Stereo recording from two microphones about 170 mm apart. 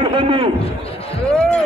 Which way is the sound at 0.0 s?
30° right (ahead or behind).